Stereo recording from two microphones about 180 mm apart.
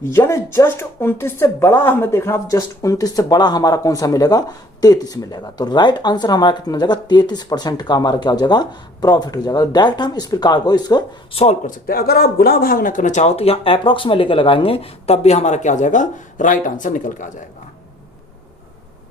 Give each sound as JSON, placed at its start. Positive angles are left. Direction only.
{"t": 0.0, "sound": "speech", "side_deg": 15}
{"t": 11.9, "sound": "speech", "side_deg": 55}